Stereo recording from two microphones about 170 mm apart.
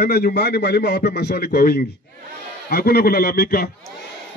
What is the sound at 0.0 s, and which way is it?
A man's voice, 65° left (ahead or behind).